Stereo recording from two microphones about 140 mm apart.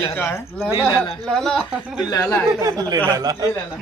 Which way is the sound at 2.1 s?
20° left (ahead or behind).